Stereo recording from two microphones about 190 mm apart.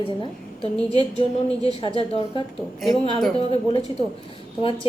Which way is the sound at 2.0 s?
30° left (ahead or behind).